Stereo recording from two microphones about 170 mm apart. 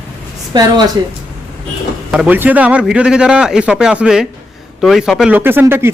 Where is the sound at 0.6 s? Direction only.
25° right (ahead or behind).